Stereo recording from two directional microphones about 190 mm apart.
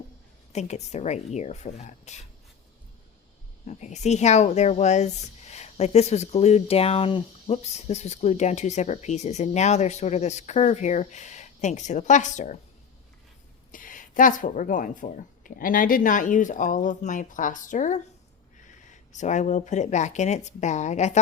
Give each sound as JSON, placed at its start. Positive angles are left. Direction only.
{"t": 0.5, "sound": "speech", "side_deg": 35}
{"t": 3.7, "sound": "speech", "side_deg": 40}
{"t": 13.7, "sound": "speech", "side_deg": 45}